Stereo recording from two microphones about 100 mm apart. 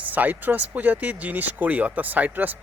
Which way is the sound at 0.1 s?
15° right (ahead or behind).